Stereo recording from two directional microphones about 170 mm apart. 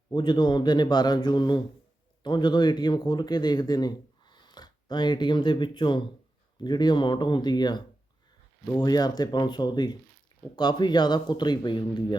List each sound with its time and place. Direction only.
0.1 s speech: 25° left (ahead or behind)